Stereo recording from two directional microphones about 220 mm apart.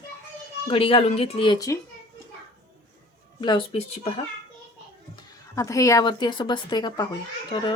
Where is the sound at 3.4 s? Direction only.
20° left (ahead or behind).